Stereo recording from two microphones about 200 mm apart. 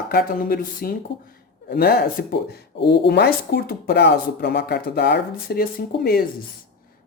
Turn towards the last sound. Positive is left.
turn(degrees=50)  # may be behind; listen again after turning